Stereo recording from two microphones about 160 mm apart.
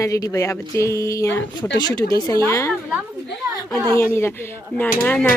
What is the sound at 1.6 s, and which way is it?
Speech, 90° left.